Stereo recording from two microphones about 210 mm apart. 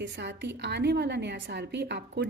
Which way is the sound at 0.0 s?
55° right (ahead or behind).